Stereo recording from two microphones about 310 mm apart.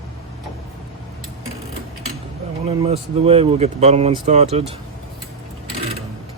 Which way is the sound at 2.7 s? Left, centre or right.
Centre.